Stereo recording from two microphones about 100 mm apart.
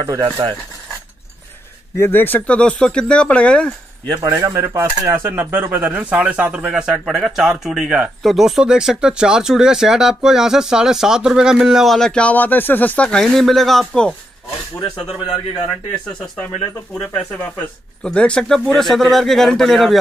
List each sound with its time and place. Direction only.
0.0 s speech: 45° right (ahead or behind)
2.0 s speech: 20° left (ahead or behind)
4.2 s speech: 35° right (ahead or behind); by 14.1 s 5° left (ahead or behind)
15.7 s speech: 10° left (ahead or behind)